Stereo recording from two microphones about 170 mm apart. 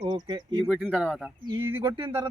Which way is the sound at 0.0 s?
25° right (ahead or behind).